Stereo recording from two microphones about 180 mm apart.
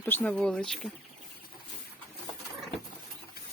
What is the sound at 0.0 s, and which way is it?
Speech, 10° left (ahead or behind).